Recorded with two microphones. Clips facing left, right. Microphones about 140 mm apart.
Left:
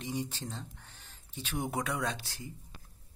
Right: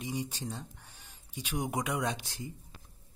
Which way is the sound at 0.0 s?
10° right (ahead or behind).